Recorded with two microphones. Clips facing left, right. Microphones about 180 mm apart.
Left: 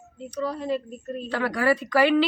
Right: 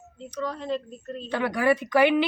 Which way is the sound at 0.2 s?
10° left (ahead or behind).